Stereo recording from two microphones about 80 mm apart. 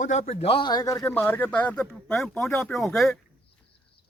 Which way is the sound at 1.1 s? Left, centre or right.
Left.